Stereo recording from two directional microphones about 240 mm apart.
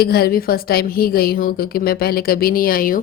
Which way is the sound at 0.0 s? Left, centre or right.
Left.